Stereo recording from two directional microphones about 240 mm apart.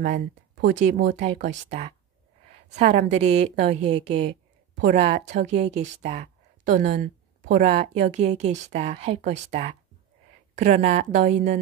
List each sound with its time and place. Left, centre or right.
0.0 s a woman's voice: right